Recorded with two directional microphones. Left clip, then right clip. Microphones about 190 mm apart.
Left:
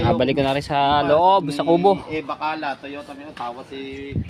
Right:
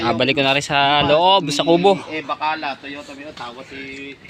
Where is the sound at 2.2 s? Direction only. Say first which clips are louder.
Right 3 dB; 55° left (ahead or behind).